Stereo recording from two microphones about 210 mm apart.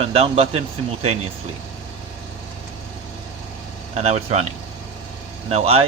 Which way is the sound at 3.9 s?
30° right (ahead or behind).